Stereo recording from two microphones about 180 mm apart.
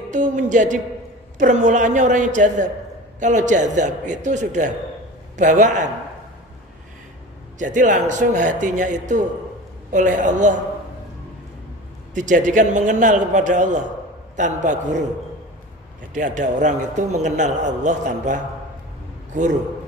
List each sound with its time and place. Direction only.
0.1 s a man's voice: 40° right (ahead or behind)
7.5 s a man's voice: 45° right (ahead or behind)
12.1 s a man's voice: 45° right (ahead or behind)
16.1 s a man's voice: 45° right (ahead or behind)